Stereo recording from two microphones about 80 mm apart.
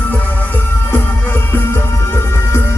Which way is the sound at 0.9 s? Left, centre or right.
Left.